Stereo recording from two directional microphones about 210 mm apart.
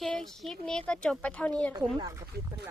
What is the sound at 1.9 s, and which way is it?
Speech, 20° right (ahead or behind).